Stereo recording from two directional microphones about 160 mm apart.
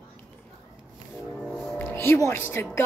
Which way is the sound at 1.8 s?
15° left (ahead or behind).